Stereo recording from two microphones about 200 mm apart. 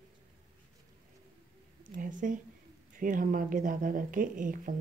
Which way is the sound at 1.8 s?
40° right (ahead or behind).